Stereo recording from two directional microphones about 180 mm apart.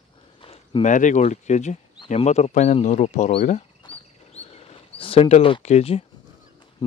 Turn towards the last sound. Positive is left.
turn(degrees=35)  # may be behind; listen again after turning